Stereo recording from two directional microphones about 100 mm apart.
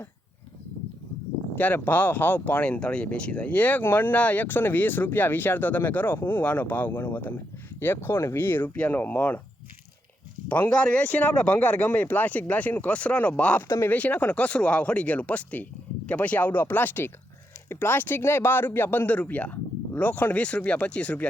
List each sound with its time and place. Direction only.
1.5 s speech: 15° left (ahead or behind)
10.7 s speech: 15° left (ahead or behind)
13.7 s speech: 25° left (ahead or behind)
13.9 s speech: 15° left (ahead or behind)